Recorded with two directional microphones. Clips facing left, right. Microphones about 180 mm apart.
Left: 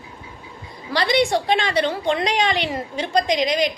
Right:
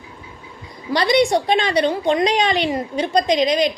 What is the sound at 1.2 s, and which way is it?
A woman's voice, 20° right (ahead or behind).